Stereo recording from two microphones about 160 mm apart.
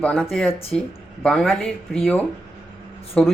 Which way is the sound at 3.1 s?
5° left (ahead or behind).